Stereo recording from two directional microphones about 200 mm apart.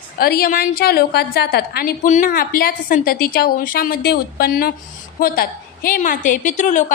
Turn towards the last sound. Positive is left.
turn(degrees=40)  # may be behind; listen again after turning